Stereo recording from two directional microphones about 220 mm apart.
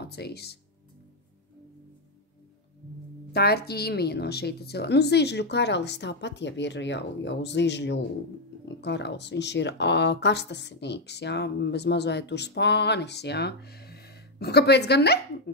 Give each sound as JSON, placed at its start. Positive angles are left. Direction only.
{"t": 0.0, "sound": "speech", "side_deg": 45}
{"t": 3.3, "sound": "speech", "side_deg": 45}